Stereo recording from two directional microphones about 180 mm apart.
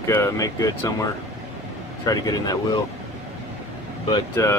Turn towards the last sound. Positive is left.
turn(degrees=15)  # may be behind; listen again after turning